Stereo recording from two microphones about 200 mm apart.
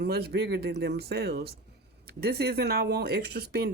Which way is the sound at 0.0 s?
50° right (ahead or behind).